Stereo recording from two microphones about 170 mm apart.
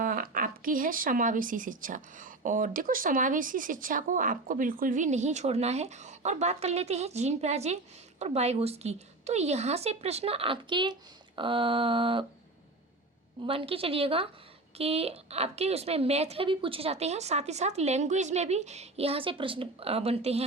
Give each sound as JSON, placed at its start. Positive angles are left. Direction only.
{"t": 0.0, "sound": "speech", "side_deg": -55}
{"t": 13.4, "sound": "speech", "side_deg": -30}